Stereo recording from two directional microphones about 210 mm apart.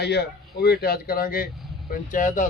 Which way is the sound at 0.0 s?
50° left (ahead or behind).